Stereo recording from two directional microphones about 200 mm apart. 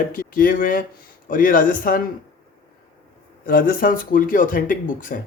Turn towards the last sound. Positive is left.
turn(degrees=40)  # may be behind; listen again after turning